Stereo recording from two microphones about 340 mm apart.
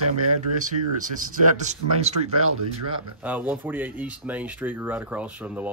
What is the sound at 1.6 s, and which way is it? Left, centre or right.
Speech, centre.